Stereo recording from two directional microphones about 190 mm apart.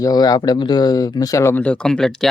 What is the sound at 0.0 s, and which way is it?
Speech, 20° left (ahead or behind).